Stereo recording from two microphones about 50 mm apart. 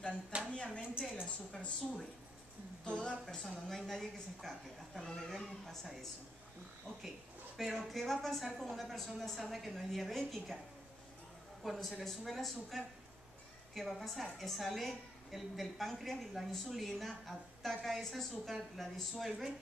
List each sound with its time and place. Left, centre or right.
0.3 s a sound: right
1.5 s speech: centre
3.3 s a woman's voice: centre
7.5 s a woman's voice: centre
11.6 s a woman's voice: centre